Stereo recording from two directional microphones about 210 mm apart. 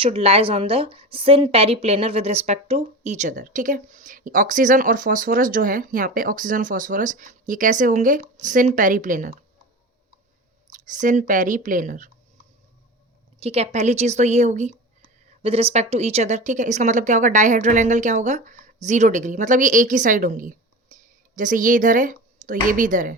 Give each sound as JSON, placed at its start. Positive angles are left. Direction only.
{"t": 0.0, "sound": "a woman's voice", "side_deg": -30}
{"t": 10.7, "sound": "a woman's voice", "side_deg": -35}
{"t": 13.4, "sound": "a woman's voice", "side_deg": -30}